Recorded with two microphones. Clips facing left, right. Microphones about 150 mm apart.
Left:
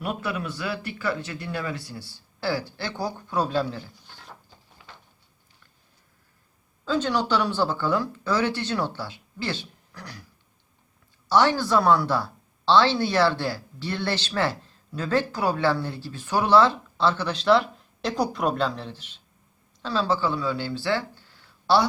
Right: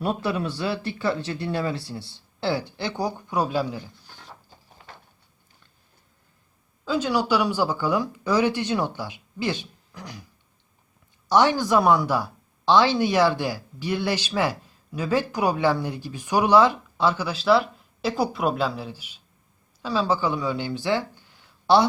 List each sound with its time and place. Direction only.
0.0 s speech: 30° right (ahead or behind); by 4.1 s 10° right (ahead or behind)
4.8 s a sound: 45° right (ahead or behind)
6.8 s speech: 10° right (ahead or behind)
11.3 s speech: 15° right (ahead or behind)